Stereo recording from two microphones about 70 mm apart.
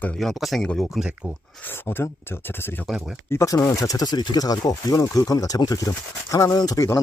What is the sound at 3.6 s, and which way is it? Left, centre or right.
Speech, left.